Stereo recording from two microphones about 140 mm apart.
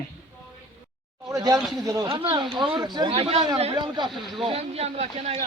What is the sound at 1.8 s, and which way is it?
Speech, 25° right (ahead or behind).